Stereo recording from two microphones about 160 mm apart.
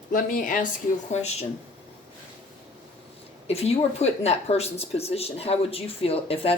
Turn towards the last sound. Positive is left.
turn(degrees=35)  # may be behind; listen again after turning